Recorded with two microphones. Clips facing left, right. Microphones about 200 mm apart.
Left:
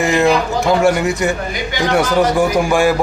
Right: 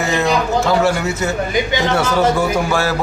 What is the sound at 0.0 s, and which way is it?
Speech, 15° left (ahead or behind).